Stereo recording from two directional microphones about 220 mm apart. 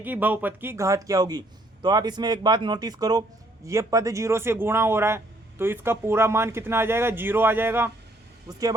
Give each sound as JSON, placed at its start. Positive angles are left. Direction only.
{"t": 0.0, "sound": "speech", "side_deg": -10}